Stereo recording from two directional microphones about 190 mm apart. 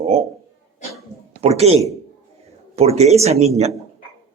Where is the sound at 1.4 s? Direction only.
35° right (ahead or behind).